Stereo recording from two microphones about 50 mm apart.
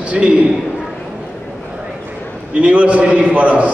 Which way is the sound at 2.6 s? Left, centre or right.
Right.